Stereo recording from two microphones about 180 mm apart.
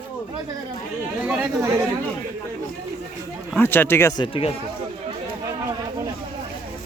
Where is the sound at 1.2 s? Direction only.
10° right (ahead or behind).